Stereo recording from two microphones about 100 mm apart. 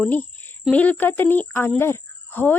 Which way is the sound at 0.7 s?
15° left (ahead or behind).